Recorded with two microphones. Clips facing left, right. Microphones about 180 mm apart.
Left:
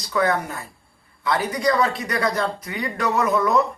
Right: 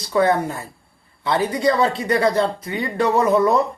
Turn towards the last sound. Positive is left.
turn(degrees=-30)  # may be behind; listen again after turning